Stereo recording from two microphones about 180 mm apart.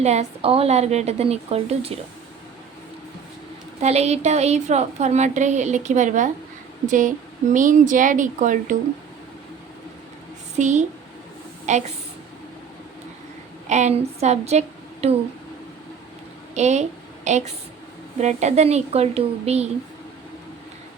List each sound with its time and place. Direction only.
0.0 s a woman's voice: 35° right (ahead or behind)
3.8 s a woman's voice: 35° right (ahead or behind)
10.5 s a woman's voice: 40° right (ahead or behind)
13.7 s a woman's voice: 40° right (ahead or behind)
16.6 s a woman's voice: 40° right (ahead or behind)